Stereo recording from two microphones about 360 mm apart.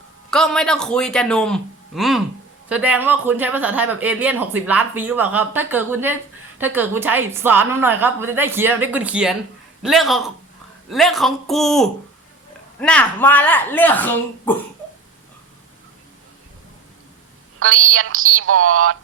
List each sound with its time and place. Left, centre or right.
0.3 s speech: centre
17.6 s speech: right